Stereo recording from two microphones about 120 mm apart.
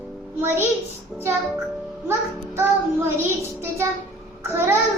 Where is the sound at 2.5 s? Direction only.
20° right (ahead or behind).